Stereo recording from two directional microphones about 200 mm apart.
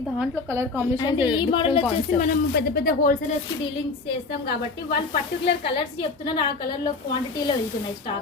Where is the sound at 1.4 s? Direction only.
25° left (ahead or behind); by 3.2 s 45° left (ahead or behind).